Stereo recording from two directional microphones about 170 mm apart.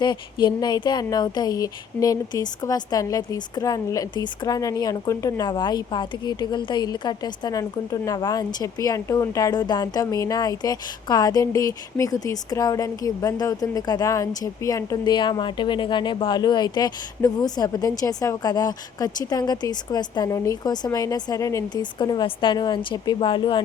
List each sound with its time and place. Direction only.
0.0 s speech: 25° left (ahead or behind)